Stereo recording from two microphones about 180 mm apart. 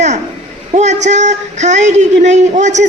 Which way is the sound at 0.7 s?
40° right (ahead or behind).